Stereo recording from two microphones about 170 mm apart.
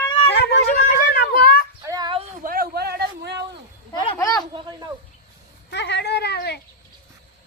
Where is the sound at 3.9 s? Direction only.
30° left (ahead or behind).